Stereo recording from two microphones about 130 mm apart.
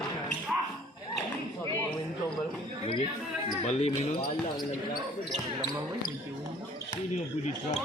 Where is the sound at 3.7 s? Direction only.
55° left (ahead or behind).